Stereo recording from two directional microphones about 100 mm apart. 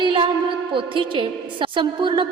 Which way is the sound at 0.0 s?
55° right (ahead or behind).